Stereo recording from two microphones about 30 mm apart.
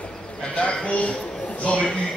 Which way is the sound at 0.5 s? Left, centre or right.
Left.